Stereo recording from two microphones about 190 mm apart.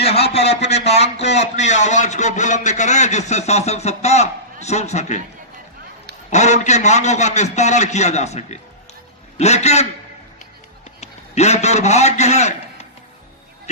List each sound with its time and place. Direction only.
0.0 s a man's voice: 35° left (ahead or behind)
6.3 s a man's voice: 35° left (ahead or behind)
11.0 s a man's voice: 35° left (ahead or behind)